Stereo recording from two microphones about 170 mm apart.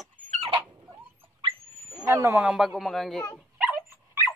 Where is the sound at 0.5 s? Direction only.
25° right (ahead or behind).